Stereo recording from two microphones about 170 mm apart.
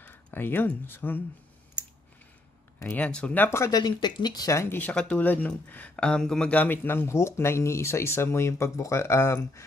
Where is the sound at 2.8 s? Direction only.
10° left (ahead or behind).